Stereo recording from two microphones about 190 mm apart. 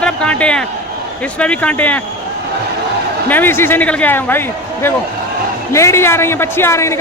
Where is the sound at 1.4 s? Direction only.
5° left (ahead or behind).